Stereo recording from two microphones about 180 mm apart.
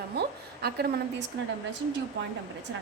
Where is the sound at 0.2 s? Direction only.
65° right (ahead or behind).